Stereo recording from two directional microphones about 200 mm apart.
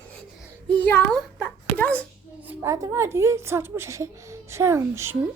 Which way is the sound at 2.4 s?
10° right (ahead or behind).